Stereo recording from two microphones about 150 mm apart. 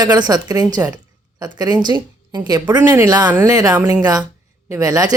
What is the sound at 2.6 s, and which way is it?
Speech, 10° right (ahead or behind).